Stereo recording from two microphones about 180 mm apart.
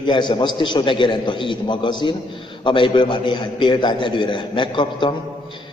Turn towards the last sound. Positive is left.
turn(degrees=25)  # may be behind; listen again after turning